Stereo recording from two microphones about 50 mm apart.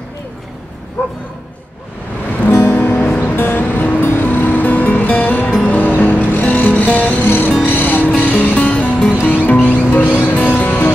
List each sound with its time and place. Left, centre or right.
1.0 s bow-wow: left
2.4 s music: left
7.2 s music: left